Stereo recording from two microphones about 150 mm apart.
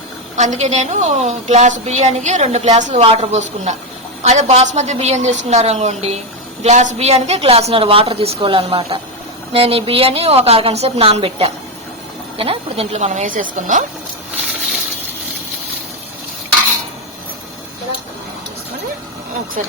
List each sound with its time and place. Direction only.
0.3 s a woman's voice: 50° right (ahead or behind)
19.6 s speech: 55° right (ahead or behind)